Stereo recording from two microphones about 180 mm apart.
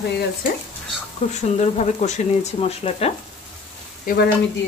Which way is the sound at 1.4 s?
40° left (ahead or behind).